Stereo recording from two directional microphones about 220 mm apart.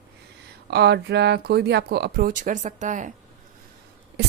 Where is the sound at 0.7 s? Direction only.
50° right (ahead or behind).